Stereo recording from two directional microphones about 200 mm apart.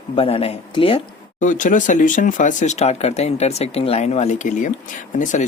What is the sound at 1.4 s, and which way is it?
Speech, 40° left (ahead or behind).